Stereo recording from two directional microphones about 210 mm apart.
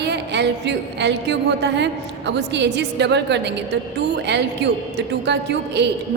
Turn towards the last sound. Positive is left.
turn(degrees=-55)  # may be behind; listen again after turning